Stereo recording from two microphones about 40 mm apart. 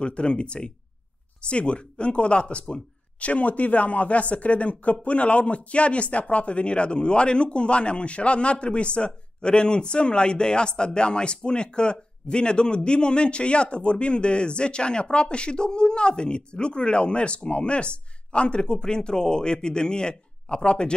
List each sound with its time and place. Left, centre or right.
0.0 s speech: left